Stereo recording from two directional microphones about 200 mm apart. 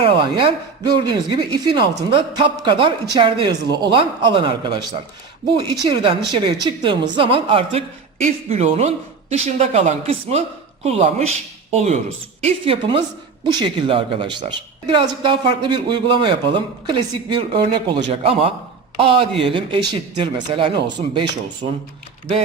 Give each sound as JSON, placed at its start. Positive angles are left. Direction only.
{"t": 0.0, "sound": "a woman's voice", "side_deg": -25}
{"t": 5.8, "sound": "a woman's voice", "side_deg": -25}